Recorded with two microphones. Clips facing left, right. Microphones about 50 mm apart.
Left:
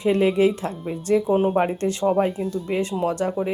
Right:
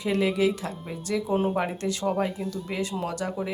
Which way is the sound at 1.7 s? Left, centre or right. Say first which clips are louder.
Left 6 dB; left.